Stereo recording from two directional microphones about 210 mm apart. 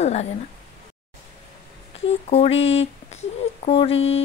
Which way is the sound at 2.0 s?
30° left (ahead or behind).